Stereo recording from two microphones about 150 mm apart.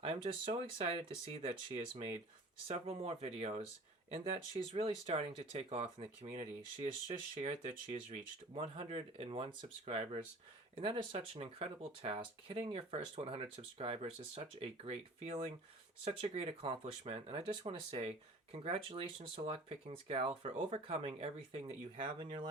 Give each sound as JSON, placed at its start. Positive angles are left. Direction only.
{"t": 0.0, "sound": "speech", "side_deg": -35}